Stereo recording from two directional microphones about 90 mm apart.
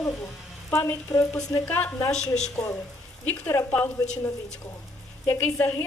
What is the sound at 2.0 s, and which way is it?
Speech, 5° left (ahead or behind).